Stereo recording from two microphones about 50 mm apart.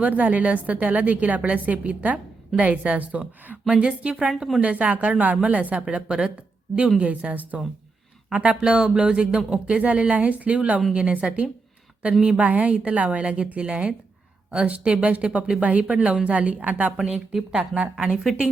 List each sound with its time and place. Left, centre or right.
0.0 s a woman's voice: right
3.7 s a woman's voice: right
4.6 s a woman's voice: right
5.9 s a woman's voice: centre
17.5 s a woman's voice: centre